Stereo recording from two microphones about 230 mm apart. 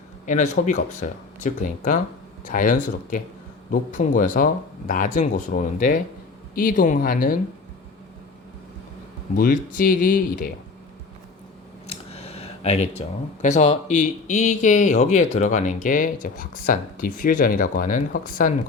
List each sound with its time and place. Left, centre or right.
0.3 s speech: left
9.3 s speech: left
11.9 s speech: left